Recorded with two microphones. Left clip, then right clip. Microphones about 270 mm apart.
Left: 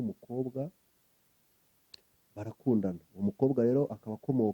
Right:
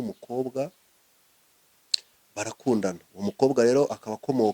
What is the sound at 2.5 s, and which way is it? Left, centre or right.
Speech, centre.